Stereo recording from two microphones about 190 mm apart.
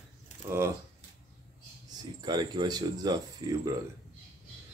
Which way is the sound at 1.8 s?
20° right (ahead or behind).